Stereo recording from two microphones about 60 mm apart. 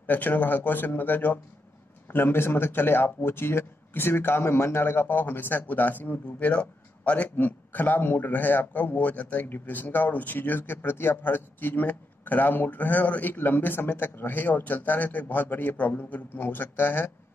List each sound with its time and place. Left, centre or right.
0.0 s speech: left
7.3 s speech: left